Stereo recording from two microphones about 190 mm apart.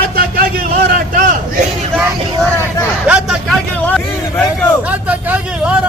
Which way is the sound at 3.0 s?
5° right (ahead or behind).